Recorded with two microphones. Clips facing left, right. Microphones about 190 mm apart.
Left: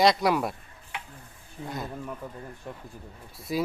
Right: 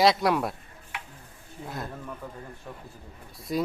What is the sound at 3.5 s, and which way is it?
Speech, 5° left (ahead or behind).